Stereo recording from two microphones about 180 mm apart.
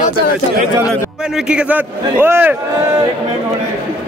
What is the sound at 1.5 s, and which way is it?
A man's voice, 5° right (ahead or behind).